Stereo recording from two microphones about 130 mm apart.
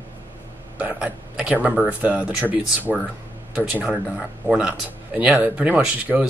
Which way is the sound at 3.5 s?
10° right (ahead or behind).